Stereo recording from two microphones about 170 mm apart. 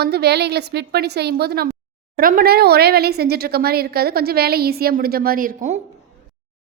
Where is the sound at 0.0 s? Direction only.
70° right (ahead or behind); by 5.8 s 50° right (ahead or behind).